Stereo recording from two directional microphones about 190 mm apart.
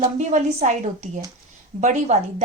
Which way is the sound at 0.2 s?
40° right (ahead or behind).